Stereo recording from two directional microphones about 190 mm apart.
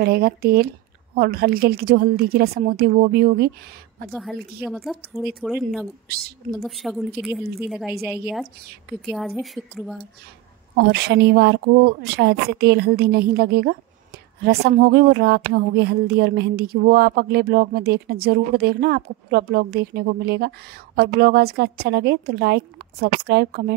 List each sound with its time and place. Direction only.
0.0 s a woman's voice: 50° right (ahead or behind)
4.6 s a woman's voice: centre (ahead or behind)
9.1 s a woman's voice: centre (ahead or behind)
10.8 s a woman's voice: 60° right (ahead or behind)